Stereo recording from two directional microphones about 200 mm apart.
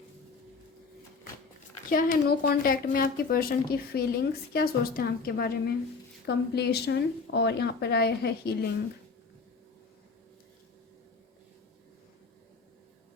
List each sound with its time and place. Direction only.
1.9 s speech: 45° left (ahead or behind)